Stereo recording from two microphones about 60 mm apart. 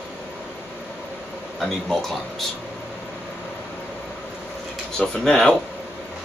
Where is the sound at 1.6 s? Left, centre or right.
Centre.